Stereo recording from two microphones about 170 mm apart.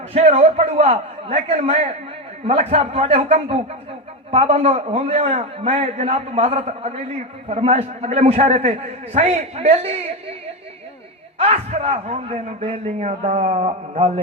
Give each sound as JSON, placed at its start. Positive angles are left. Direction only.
{"t": 0.1, "sound": "a man's voice", "side_deg": -35}
{"t": 11.3, "sound": "a man's voice", "side_deg": -40}